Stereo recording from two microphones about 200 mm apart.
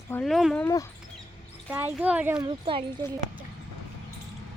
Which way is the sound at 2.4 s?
25° right (ahead or behind).